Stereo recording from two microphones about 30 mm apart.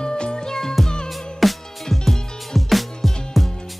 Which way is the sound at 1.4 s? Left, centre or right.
Centre.